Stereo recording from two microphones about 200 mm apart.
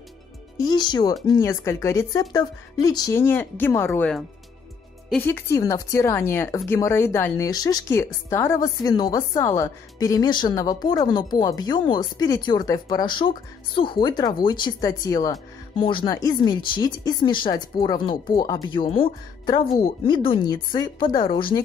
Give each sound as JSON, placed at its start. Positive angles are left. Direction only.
{"t": 0.6, "sound": "speech", "side_deg": 20}